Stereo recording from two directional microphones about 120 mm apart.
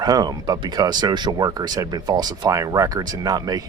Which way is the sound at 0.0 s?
30° right (ahead or behind).